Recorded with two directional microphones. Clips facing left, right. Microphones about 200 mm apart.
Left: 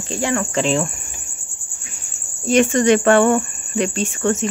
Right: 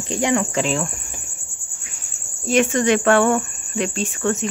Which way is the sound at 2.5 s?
Centre (ahead or behind).